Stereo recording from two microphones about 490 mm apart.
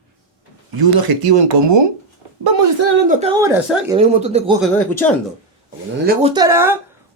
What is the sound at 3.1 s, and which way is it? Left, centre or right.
Speech, centre.